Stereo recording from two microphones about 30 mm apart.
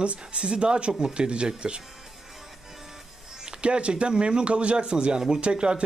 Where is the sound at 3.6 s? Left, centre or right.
Right.